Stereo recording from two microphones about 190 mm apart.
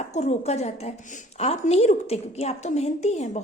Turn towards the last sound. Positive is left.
turn(degrees=35)  # may be behind; listen again after turning